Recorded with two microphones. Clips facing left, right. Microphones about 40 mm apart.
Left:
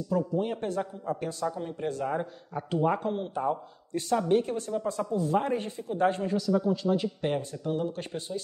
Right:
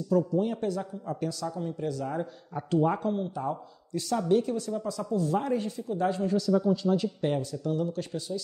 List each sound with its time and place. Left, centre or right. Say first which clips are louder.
0.1 s speech: right 3 dB; centre
1.1 s speech: left 3 dB; centre
1.4 s a man's voice: left 1 dB; left
2.5 s speech: right 1 dB; centre; by 5.0 s left
5.1 s speech: even; centre
5.4 s a man's voice: right 1 dB; left
6.2 s speech: right 1 dB; centre; by 8.4 s left